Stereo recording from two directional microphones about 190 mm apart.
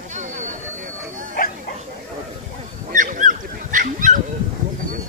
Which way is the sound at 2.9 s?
45° right (ahead or behind).